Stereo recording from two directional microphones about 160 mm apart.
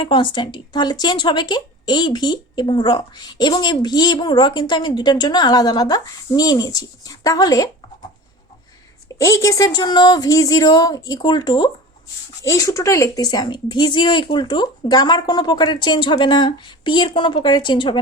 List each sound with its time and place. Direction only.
0.0 s speech: 30° left (ahead or behind)
9.0 s speech: 20° left (ahead or behind)